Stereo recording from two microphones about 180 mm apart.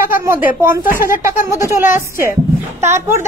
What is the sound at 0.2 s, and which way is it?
A woman's voice, 15° right (ahead or behind).